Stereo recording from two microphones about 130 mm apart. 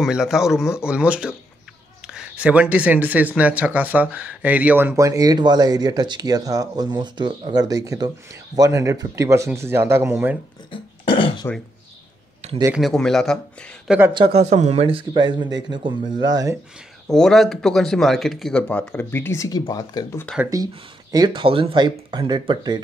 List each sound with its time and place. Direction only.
0.0 s speech: 5° right (ahead or behind)
10.7 s burping: 40° left (ahead or behind)
12.7 s speech: centre (ahead or behind)
13.8 s a woman's voice: 15° right (ahead or behind)
14.1 s speech: 40° right (ahead or behind)
14.4 s speech: 60° right (ahead or behind); by 16.5 s 30° right (ahead or behind)
17.1 s speech: 5° left (ahead or behind); by 20.2 s 30° left (ahead or behind)
20.4 s speech: 30° right (ahead or behind)